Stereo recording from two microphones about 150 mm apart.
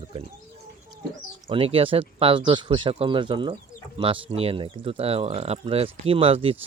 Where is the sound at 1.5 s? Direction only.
40° right (ahead or behind).